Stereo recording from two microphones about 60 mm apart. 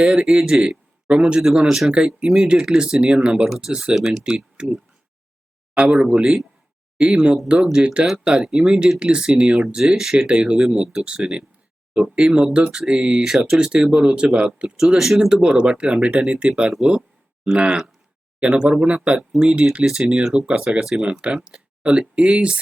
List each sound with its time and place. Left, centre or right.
0.0 s speech: centre
1.4 s speech: centre
3.4 s speech: centre
3.9 s speech: centre
4.2 s speech: centre
20.2 s speech: centre
21.0 s speech: centre